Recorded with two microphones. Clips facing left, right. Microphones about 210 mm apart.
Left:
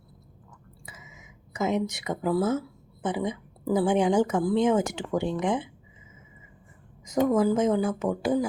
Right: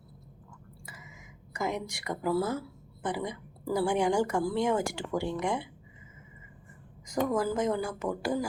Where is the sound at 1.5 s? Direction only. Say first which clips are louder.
Left 6 dB; 20° left (ahead or behind).